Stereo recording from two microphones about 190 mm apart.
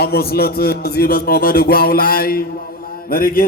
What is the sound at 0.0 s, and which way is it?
A man's voice, 55° left (ahead or behind).